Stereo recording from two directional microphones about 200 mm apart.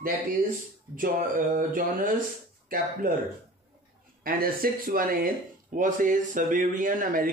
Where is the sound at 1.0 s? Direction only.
45° right (ahead or behind).